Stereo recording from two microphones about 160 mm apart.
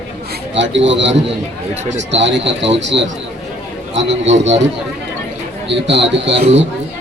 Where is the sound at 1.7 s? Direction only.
45° right (ahead or behind).